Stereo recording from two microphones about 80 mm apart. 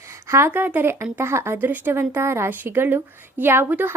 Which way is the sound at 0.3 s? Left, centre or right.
Right.